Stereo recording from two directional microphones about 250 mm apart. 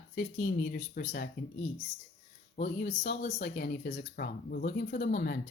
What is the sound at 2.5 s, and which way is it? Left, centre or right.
Speech, left.